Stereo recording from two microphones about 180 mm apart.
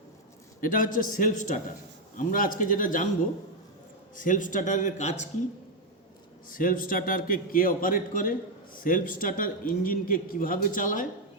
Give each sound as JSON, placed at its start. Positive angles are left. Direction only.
{"t": 0.6, "sound": "a man's voice", "side_deg": 50}
{"t": 4.1, "sound": "a man's voice", "side_deg": 45}
{"t": 6.5, "sound": "a man's voice", "side_deg": 50}